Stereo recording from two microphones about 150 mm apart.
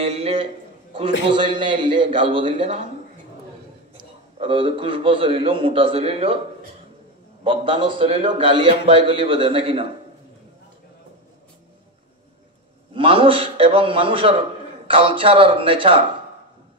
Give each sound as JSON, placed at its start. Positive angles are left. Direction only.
{"t": 0.0, "sound": "a man's voice", "side_deg": -40}
{"t": 3.9, "sound": "a man's voice", "side_deg": -35}
{"t": 7.4, "sound": "a man's voice", "side_deg": -35}
{"t": 12.9, "sound": "a man's voice", "side_deg": -35}